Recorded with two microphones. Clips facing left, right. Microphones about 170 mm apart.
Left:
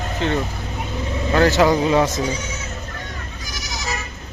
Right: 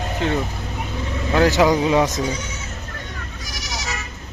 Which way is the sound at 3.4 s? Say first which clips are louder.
Right 2 dB; 70° right (ahead or behind).